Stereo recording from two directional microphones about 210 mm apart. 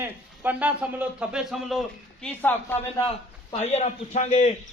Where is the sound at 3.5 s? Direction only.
30° left (ahead or behind).